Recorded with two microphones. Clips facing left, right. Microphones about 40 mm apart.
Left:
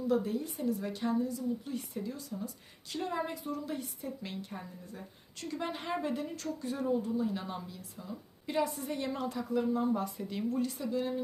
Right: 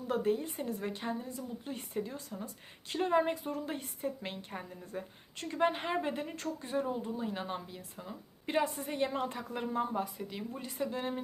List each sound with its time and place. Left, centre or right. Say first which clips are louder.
0.1 s a woman's voice: right 1 dB; right
9.8 s speech: left 3 dB; centre
10.2 s speech: left 6 dB; centre
10.6 s speech: left 3 dB; right